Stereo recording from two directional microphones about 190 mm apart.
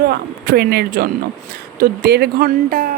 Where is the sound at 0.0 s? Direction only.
55° right (ahead or behind).